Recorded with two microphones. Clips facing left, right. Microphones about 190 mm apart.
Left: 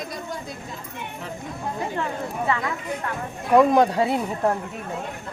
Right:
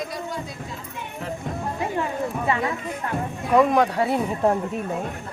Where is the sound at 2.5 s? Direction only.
25° right (ahead or behind).